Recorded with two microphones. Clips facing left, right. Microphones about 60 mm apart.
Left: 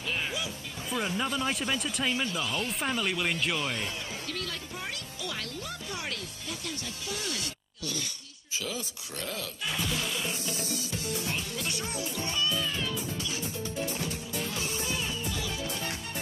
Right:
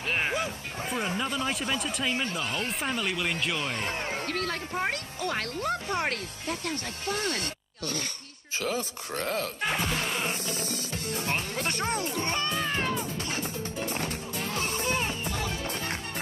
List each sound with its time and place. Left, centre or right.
0.1 s music: right
1.0 s speech: centre
2.2 s speech: right
2.8 s speech: centre
3.5 s music: right